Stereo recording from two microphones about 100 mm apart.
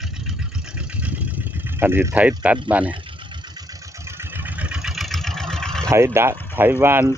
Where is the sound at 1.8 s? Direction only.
20° right (ahead or behind).